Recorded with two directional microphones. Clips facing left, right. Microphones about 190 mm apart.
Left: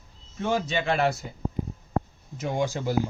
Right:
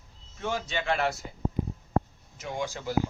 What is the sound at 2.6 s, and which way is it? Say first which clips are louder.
Speech: left 5 dB; 20° left (ahead or behind).